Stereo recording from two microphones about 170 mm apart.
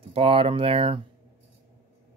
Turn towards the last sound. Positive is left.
turn(degrees=-35)  # may be behind; listen again after turning